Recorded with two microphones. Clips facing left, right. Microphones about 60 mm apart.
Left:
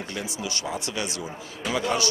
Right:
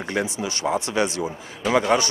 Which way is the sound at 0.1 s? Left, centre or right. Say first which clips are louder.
Right 9 dB; right.